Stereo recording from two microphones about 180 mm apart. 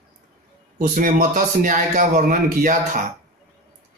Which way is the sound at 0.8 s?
50° right (ahead or behind).